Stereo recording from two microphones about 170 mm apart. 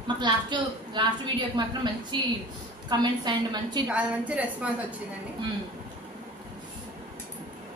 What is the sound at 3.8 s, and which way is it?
Speech, 10° right (ahead or behind).